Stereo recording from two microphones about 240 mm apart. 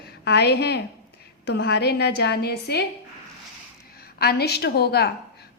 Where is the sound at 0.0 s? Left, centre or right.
Left.